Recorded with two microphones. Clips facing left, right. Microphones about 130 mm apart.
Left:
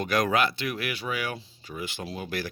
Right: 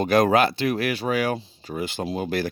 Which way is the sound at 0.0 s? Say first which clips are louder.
Right 6 dB; 30° right (ahead or behind).